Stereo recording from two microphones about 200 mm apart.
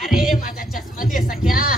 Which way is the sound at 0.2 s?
45° left (ahead or behind).